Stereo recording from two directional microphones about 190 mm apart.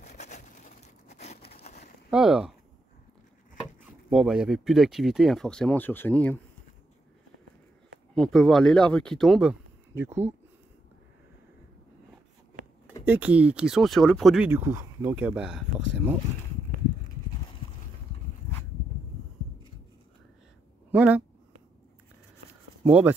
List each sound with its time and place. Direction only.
0.0 s crushing: 35° left (ahead or behind)
2.0 s speech: 5° right (ahead or behind)
4.1 s speech: centre (ahead or behind)
8.1 s speech: 5° left (ahead or behind)
13.0 s speech: 10° right (ahead or behind)
20.9 s speech: 5° right (ahead or behind)
22.8 s speech: 10° right (ahead or behind)